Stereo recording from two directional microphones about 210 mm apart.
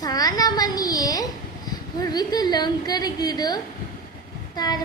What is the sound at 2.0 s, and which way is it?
A woman's voice, 20° left (ahead or behind).